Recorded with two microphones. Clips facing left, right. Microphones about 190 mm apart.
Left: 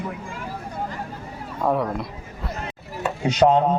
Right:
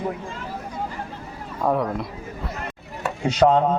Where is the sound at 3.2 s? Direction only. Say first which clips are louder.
Even; 10° left (ahead or behind).